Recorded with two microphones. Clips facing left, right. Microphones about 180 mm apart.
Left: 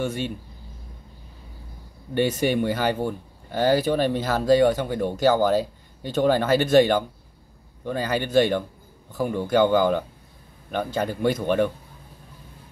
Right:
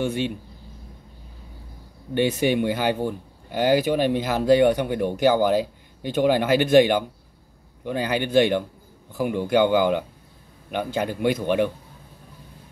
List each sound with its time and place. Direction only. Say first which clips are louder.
0.0 s speech: right 2 dB; 15° right (ahead or behind)
2.1 s speech: right 1 dB; 15° right (ahead or behind)